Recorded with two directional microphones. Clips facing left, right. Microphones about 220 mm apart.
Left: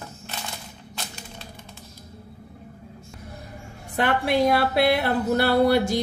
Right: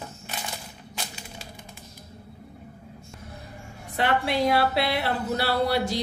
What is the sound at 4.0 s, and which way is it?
A woman's voice, 50° left (ahead or behind).